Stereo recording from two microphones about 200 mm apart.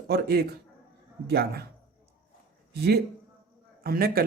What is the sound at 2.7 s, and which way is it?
Speech, 55° right (ahead or behind).